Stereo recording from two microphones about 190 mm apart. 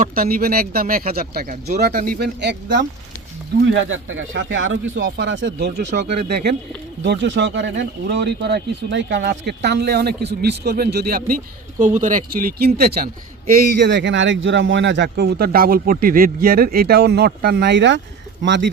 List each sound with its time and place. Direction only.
0.0 s a man's voice: 50° right (ahead or behind); by 2.8 s 65° right (ahead or behind)
3.8 s a man's voice: 90° right; by 6.5 s 60° right (ahead or behind)
7.0 s a man's voice: 70° right (ahead or behind); by 11.3 s 50° right (ahead or behind)
11.8 s a man's voice: 40° right (ahead or behind); by 18.7 s 65° right (ahead or behind)